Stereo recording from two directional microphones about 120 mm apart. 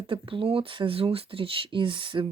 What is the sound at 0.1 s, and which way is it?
Speech, 45° right (ahead or behind).